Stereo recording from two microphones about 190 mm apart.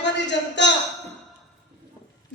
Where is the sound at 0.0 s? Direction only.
70° left (ahead or behind).